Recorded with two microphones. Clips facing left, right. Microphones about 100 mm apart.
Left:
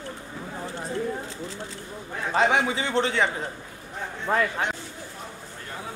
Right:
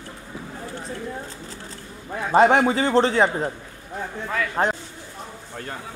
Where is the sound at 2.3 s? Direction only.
50° right (ahead or behind).